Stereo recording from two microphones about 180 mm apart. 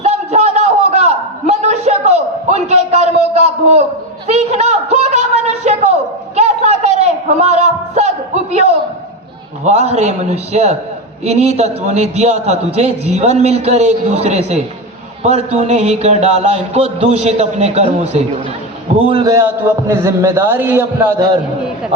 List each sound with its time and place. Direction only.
0.0 s a sound: 35° right (ahead or behind)
9.6 s a man's voice: 35° right (ahead or behind)
19.0 s a man's voice: 25° right (ahead or behind)